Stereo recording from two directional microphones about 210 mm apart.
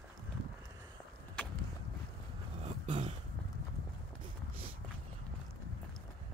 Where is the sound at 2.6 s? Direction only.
25° right (ahead or behind).